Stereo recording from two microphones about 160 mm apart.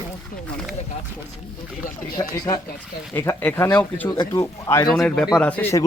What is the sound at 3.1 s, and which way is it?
Speech, 15° left (ahead or behind).